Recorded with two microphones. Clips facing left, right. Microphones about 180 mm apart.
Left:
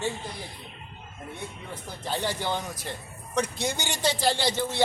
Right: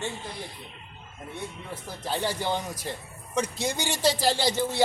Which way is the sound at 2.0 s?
5° right (ahead or behind).